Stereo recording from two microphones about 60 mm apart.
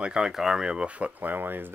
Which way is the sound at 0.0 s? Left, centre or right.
Centre.